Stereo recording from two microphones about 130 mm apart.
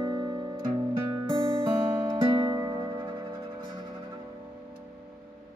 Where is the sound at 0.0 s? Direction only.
35° right (ahead or behind).